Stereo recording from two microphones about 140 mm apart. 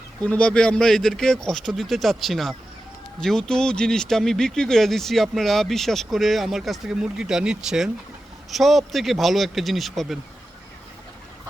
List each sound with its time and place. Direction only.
0.3 s speech: 10° left (ahead or behind)